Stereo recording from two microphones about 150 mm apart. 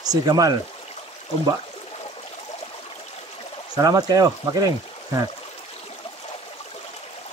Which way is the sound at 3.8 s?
25° right (ahead or behind).